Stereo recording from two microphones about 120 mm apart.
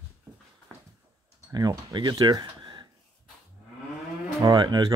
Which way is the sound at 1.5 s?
35° right (ahead or behind).